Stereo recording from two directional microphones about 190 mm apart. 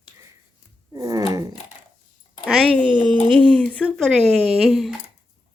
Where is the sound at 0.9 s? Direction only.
20° right (ahead or behind).